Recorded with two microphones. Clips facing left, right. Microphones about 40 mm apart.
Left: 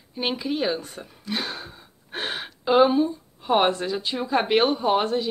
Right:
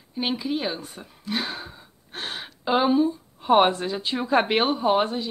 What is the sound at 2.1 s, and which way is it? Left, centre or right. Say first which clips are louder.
Gasp: left 3 dB; centre.